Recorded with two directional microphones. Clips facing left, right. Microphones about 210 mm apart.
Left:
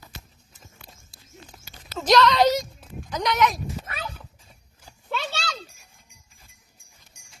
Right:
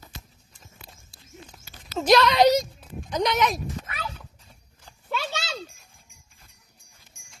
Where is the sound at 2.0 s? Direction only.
10° right (ahead or behind).